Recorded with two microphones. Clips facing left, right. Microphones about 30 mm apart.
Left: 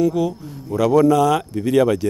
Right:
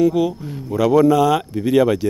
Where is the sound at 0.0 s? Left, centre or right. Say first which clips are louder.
Right 2 dB; centre.